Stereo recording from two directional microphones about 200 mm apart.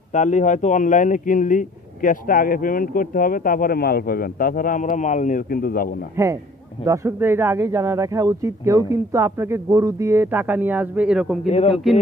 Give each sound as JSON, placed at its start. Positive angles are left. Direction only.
{"t": 0.1, "sound": "speech", "side_deg": 40}
{"t": 6.2, "sound": "speech", "side_deg": -15}
{"t": 11.4, "sound": "a man's voice", "side_deg": 30}
{"t": 11.7, "sound": "speech", "side_deg": 0}